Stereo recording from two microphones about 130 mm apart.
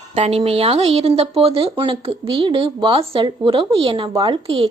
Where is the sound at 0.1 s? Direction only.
55° right (ahead or behind).